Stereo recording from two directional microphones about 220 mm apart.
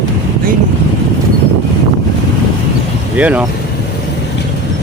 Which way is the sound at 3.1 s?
5° right (ahead or behind).